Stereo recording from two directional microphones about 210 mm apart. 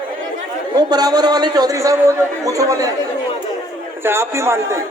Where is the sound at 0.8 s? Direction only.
20° right (ahead or behind).